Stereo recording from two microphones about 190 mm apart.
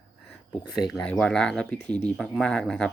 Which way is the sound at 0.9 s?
5° left (ahead or behind).